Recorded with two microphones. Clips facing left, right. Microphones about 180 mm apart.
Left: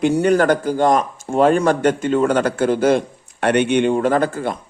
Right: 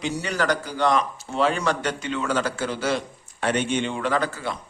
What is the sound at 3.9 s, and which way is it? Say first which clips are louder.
Speech: left 8 dB; 45° left (ahead or behind).